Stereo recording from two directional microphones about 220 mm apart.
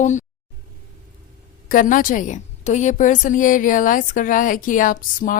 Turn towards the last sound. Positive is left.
turn(degrees=40)  # may be behind; listen again after turning